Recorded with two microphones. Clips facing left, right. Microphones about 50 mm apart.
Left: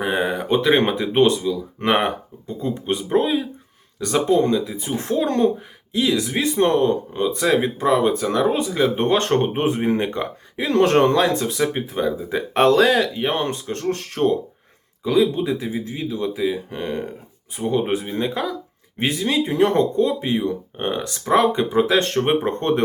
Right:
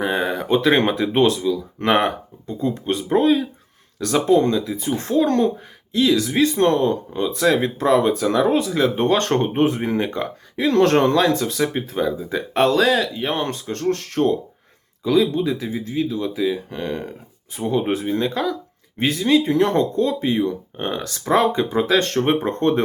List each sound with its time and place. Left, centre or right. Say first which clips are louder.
0.0 s a sound: even; centre
0.4 s speech: right 1 dB; centre
1.4 s speech: right 2 dB; left
10.8 s speech: left 2 dB; centre
11.1 s speech: right 1 dB; left
12.6 s speech: left 2 dB; left
13.2 s speech: left 1 dB; left
17.6 s speech: even; centre
19.3 s speech: right 2 dB; centre